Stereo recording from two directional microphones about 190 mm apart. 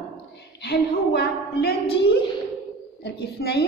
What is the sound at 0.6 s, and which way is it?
A woman's voice, 55° left (ahead or behind).